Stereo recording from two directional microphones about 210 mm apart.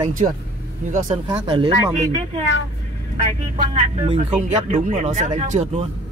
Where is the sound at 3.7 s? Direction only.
30° right (ahead or behind).